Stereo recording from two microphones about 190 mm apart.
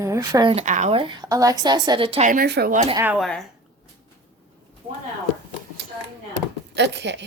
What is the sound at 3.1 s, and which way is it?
Speech, centre (ahead or behind).